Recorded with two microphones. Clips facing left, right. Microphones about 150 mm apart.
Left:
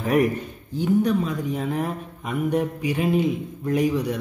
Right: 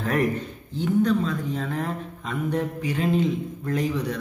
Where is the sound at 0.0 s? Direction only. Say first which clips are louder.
Left 3 dB; 15° left (ahead or behind).